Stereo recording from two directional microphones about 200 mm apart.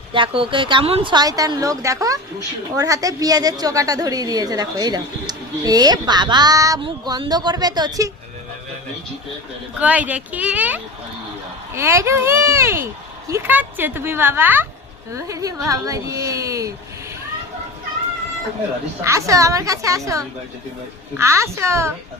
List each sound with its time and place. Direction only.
0.1 s a woman's voice: 25° right (ahead or behind)
9.7 s speech: 5° right (ahead or behind)
19.0 s speech: 15° right (ahead or behind)